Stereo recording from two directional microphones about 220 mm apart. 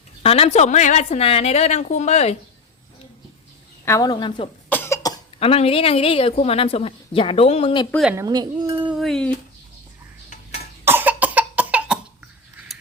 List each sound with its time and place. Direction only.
0.2 s a woman's voice: 25° left (ahead or behind)
3.8 s a woman's voice: 15° left (ahead or behind)
4.7 s cough: 10° left (ahead or behind)
5.4 s a woman's voice: 25° left (ahead or behind)
7.9 s a woman's voice: centre (ahead or behind)
8.1 s speech: 15° right (ahead or behind)
8.8 s a sound: centre (ahead or behind)
10.8 s cough: 10° right (ahead or behind)
12.5 s mechanisms: centre (ahead or behind)